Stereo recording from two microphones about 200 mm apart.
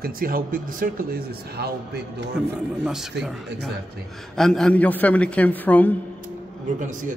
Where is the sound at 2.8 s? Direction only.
5° right (ahead or behind).